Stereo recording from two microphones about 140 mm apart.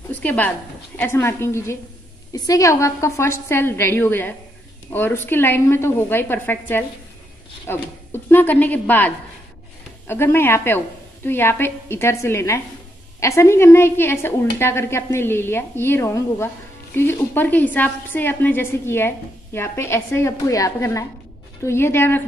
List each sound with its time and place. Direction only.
0.1 s a woman's voice: 10° left (ahead or behind)